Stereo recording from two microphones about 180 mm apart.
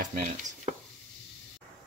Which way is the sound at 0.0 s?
45° right (ahead or behind).